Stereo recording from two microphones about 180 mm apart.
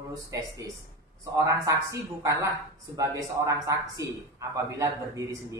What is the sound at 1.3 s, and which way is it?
Speech, 15° right (ahead or behind).